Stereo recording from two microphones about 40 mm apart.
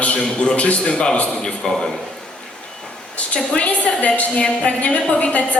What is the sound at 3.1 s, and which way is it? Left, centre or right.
A woman's voice, left.